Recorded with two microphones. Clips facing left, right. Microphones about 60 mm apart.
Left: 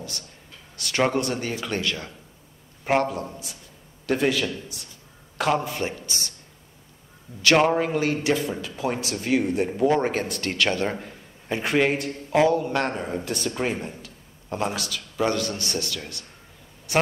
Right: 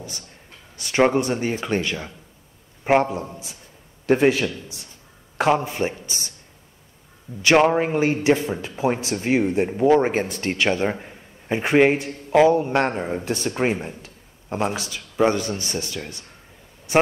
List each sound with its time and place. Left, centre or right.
0.7 s a man's voice: right
7.4 s a man's voice: centre
14.0 s a sound: right
14.8 s a man's voice: right